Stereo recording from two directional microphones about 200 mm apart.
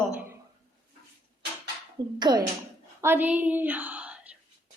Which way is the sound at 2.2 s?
20° right (ahead or behind).